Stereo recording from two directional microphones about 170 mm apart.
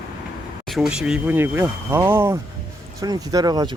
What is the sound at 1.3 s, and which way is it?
Speech, 15° right (ahead or behind).